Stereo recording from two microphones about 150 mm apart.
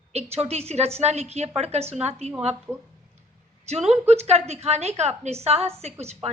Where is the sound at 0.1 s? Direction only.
45° right (ahead or behind).